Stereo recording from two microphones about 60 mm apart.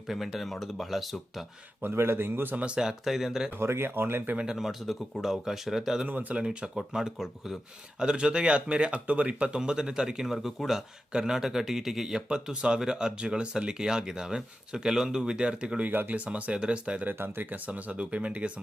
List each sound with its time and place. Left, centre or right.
0.1 s speech: centre
1.8 s a man's voice: right
2.6 s speech: centre
3.6 s a man's voice: right
4.4 s speech: centre
6.1 s speech: right
6.4 s speech: centre
15.9 s speech: right
17.1 s speech: right